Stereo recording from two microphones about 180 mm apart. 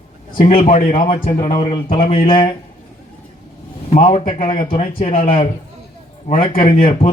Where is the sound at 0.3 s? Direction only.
40° left (ahead or behind).